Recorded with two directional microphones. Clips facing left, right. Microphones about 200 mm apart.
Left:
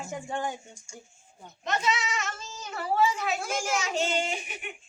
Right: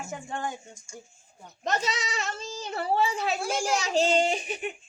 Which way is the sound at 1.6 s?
40° right (ahead or behind).